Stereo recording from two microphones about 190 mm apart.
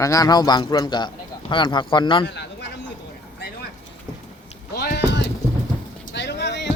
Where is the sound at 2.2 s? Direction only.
65° left (ahead or behind).